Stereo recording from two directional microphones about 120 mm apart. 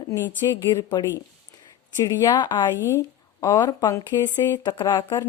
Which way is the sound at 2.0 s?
35° left (ahead or behind).